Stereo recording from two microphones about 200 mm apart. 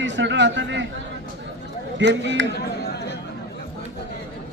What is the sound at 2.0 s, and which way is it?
Speech, 65° right (ahead or behind).